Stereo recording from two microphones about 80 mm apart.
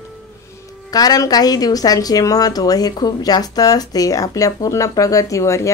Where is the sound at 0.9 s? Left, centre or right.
Left.